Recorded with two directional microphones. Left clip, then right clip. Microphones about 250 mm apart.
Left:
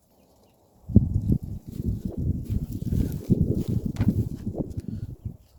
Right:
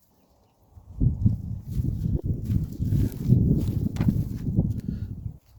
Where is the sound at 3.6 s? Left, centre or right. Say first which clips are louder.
Even; right.